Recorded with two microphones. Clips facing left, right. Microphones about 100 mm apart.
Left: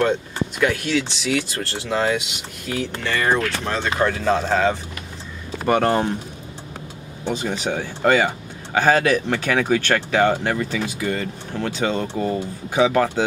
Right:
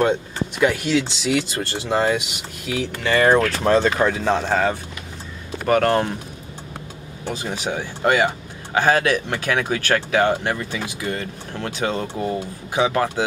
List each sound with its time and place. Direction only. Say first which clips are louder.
0.0 s speech: right 1 dB; 15° right (ahead or behind)
2.6 s speech: right 1 dB; 5° right (ahead or behind)
3.1 s speech: right 5 dB; 40° right (ahead or behind)
4.0 s speech: even; 10° right (ahead or behind)
4.5 s speech: left 1 dB; 5° right (ahead or behind)
7.4 s speech: left 2 dB; 10° right (ahead or behind)